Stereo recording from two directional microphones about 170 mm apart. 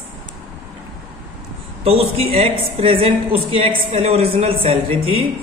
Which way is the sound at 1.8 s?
35° right (ahead or behind).